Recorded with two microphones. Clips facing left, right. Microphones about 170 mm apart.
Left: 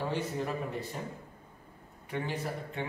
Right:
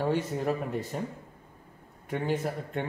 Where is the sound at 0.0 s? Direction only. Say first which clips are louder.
Right 5 dB; 45° right (ahead or behind).